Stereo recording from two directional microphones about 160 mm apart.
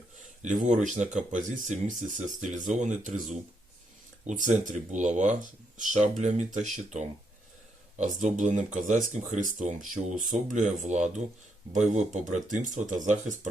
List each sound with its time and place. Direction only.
0.2 s speech: 50° right (ahead or behind)